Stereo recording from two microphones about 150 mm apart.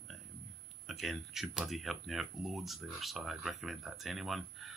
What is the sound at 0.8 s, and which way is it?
Speech, centre (ahead or behind).